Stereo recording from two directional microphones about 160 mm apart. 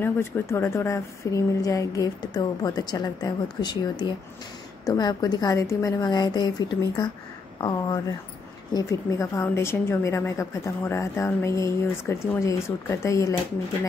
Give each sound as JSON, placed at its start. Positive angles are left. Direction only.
{"t": 0.0, "sound": "a woman's voice", "side_deg": 15}
{"t": 8.7, "sound": "a woman's voice", "side_deg": 20}